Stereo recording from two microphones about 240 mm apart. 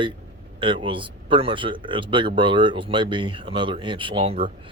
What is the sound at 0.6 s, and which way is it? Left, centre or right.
Speech, right.